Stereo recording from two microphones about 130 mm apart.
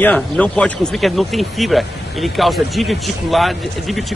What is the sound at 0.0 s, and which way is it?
Speech, 10° left (ahead or behind).